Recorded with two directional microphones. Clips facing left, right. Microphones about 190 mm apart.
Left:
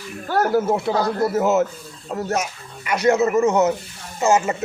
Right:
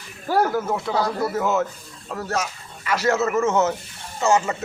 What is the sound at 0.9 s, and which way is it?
Speech, centre (ahead or behind).